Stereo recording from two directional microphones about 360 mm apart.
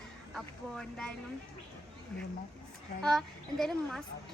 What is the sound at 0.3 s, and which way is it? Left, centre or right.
Speech, centre.